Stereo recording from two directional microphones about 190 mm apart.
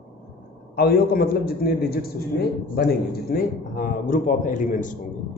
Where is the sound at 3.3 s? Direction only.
50° left (ahead or behind).